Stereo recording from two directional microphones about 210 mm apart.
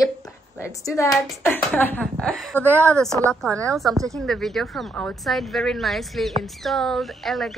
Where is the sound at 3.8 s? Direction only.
15° right (ahead or behind).